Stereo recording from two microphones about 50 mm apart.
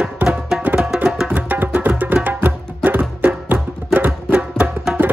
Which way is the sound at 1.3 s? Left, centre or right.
Right.